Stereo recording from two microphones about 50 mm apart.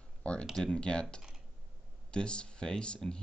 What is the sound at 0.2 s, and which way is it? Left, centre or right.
Speech, left.